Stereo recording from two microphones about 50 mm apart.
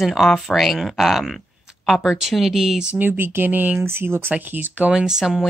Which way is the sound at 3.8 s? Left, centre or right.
Right.